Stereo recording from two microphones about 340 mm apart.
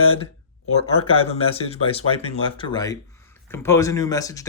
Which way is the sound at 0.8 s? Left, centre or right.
Centre.